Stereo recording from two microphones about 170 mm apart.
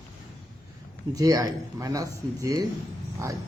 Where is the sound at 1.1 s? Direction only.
20° right (ahead or behind).